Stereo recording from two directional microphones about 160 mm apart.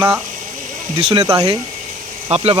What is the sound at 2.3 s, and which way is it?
Speech, 40° right (ahead or behind).